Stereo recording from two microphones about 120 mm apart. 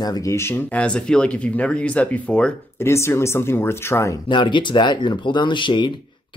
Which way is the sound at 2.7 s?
20° left (ahead or behind).